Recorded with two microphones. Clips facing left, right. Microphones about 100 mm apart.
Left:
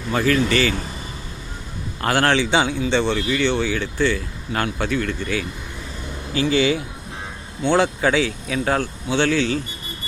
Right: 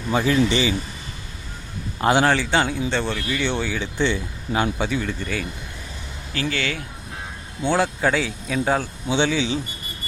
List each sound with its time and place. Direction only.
0.1 s speech: 15° right (ahead or behind)
2.0 s a man's voice: 15° right (ahead or behind)
2.2 s speech: 5° right (ahead or behind)
6.3 s speech: 20° left (ahead or behind)
7.6 s speech: 5° right (ahead or behind)